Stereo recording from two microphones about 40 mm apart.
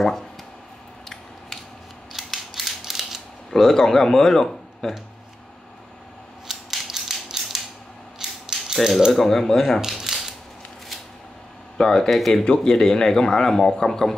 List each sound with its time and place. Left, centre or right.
2.1 s mechanisms: centre
3.5 s a man's voice: centre
6.4 s scissors: centre
6.9 s a sound: centre
8.2 s mechanisms: centre
8.7 s a man's voice: centre
9.8 s a sound: centre
11.8 s a man's voice: centre
12.1 s speech: centre
12.4 s a man's voice: centre